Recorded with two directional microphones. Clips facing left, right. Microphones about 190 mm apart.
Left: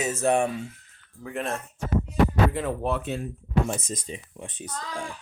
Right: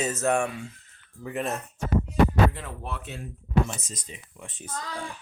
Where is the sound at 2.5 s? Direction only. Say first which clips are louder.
Left 10 dB; 75° left (ahead or behind).